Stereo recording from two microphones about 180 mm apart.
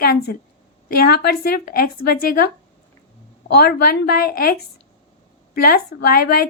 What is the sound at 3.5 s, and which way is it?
A woman's voice, 60° left (ahead or behind).